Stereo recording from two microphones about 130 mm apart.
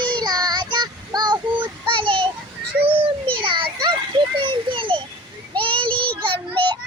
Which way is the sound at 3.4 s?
40° right (ahead or behind).